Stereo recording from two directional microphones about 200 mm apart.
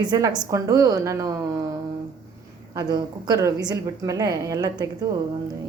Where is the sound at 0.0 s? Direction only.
20° right (ahead or behind).